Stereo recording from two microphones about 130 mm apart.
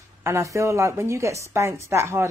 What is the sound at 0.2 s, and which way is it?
Speech, 20° right (ahead or behind).